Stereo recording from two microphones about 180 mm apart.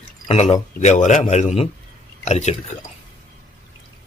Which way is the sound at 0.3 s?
35° left (ahead or behind).